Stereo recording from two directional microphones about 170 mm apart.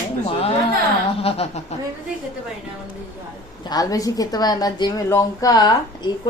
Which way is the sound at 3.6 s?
20° left (ahead or behind).